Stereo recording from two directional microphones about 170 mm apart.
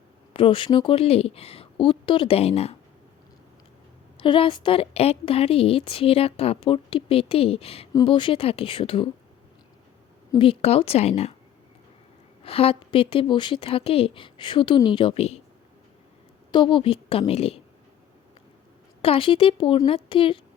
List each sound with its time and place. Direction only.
0.3 s a woman's voice: 30° left (ahead or behind)
4.2 s a woman's voice: 30° left (ahead or behind)
10.3 s a woman's voice: 30° left (ahead or behind)
12.4 s a woman's voice: 35° left (ahead or behind)
16.5 s a woman's voice: 30° left (ahead or behind)
19.0 s a woman's voice: 30° left (ahead or behind)